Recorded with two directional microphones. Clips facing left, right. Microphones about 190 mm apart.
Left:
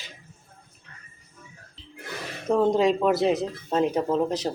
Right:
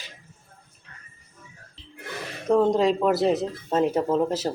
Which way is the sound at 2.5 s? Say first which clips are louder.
Right 1 dB; centre (ahead or behind).